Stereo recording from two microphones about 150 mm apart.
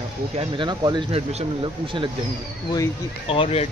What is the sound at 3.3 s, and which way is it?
Speech, 40° left (ahead or behind).